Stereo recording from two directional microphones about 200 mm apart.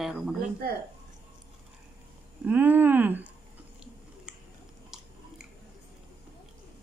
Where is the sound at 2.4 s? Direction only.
10° right (ahead or behind).